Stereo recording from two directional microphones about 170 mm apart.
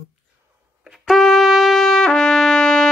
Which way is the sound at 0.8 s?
Centre (ahead or behind).